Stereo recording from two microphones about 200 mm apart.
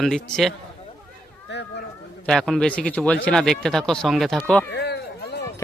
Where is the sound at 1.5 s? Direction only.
60° left (ahead or behind).